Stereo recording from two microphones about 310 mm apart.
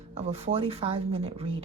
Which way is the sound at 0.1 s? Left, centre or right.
Centre.